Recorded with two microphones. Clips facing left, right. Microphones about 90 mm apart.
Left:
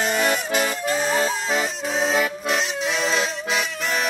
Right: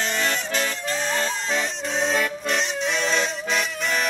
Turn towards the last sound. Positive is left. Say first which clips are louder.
# even
turn(degrees=0)  # may be behind; listen again after turning